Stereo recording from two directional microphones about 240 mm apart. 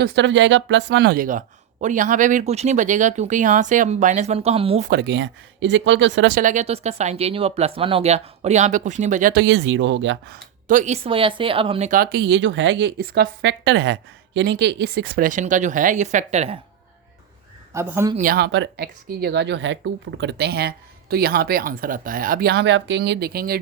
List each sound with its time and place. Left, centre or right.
0.0 s speech: right
4.9 s speech: right
10.7 s speech: right
17.7 s speech: centre
18.2 s speech: right